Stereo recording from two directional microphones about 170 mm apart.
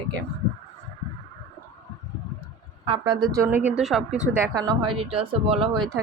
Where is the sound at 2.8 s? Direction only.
30° right (ahead or behind); by 4.5 s 10° right (ahead or behind).